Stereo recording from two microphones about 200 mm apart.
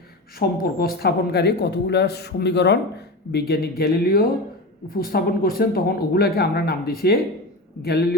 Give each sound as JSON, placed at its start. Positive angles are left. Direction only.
{"t": 0.3, "sound": "speech", "side_deg": 50}